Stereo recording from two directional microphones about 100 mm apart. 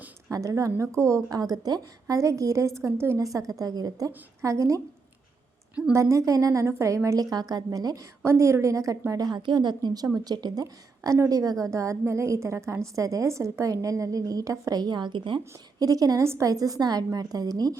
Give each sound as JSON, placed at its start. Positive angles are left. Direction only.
{"t": 0.3, "sound": "a woman's voice", "side_deg": -35}
{"t": 5.9, "sound": "a woman's voice", "side_deg": -30}
{"t": 15.8, "sound": "a woman's voice", "side_deg": -40}